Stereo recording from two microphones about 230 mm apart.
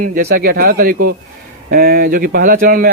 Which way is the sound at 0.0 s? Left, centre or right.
Right.